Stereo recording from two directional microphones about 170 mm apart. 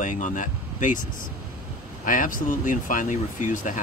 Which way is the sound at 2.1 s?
50° left (ahead or behind).